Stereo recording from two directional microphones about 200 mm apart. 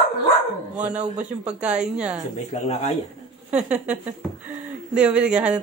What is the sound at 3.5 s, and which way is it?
Speech, 5° right (ahead or behind).